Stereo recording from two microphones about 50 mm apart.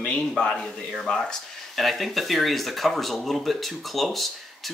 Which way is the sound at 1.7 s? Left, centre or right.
Centre.